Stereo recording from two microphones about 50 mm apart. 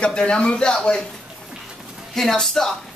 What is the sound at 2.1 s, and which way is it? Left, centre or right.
Speech, centre.